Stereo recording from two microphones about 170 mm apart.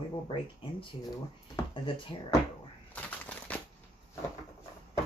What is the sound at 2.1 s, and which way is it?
Speech, 30° left (ahead or behind).